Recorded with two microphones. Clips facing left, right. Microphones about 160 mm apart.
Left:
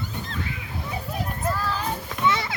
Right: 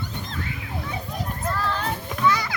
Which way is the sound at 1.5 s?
5° left (ahead or behind).